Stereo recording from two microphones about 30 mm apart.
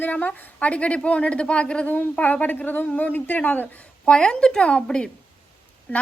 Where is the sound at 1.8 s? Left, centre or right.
Left.